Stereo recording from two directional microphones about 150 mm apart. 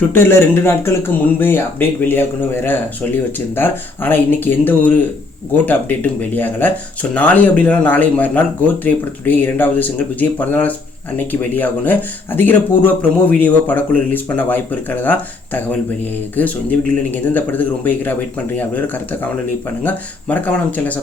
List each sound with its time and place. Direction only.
0.1 s a man's voice: 15° left (ahead or behind)
19.8 s a man's voice: 10° left (ahead or behind)